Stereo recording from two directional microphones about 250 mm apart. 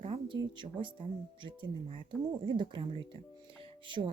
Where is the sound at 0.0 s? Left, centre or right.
Right.